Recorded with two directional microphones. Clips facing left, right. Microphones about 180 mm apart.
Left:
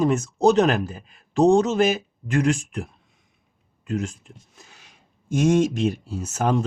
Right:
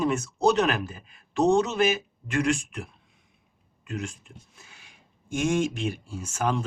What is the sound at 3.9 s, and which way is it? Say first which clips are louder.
Speech: left 7 dB; 35° left (ahead or behind).